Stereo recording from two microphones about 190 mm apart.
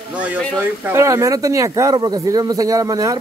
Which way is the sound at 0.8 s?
15° right (ahead or behind).